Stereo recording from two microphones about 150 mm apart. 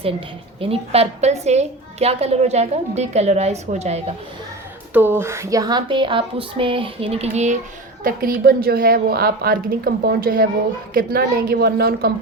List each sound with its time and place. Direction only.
0.6 s a woman's voice: 40° right (ahead or behind)
4.9 s speech: 15° right (ahead or behind); by 7.5 s 45° right (ahead or behind)
8.0 s a woman's voice: 75° right (ahead or behind); by 12.1 s 90° right